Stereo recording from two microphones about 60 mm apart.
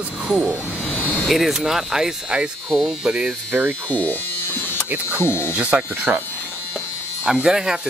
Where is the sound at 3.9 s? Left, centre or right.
Left.